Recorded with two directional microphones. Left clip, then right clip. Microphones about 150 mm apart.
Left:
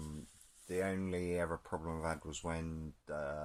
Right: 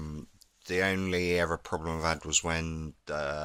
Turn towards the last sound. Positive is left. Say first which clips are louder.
# right 8 dB
turn(degrees=-30)  # may be behind; listen again after turning